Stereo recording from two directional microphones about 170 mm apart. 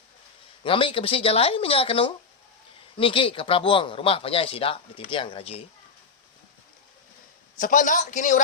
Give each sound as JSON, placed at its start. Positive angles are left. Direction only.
{"t": 0.6, "sound": "speech", "side_deg": 30}
{"t": 7.6, "sound": "a man's voice", "side_deg": 50}